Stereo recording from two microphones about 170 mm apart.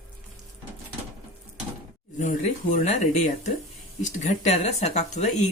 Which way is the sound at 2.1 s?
45° left (ahead or behind).